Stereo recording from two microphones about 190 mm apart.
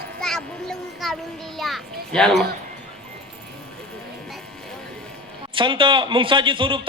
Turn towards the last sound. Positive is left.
turn(degrees=-25)  # may be behind; listen again after turning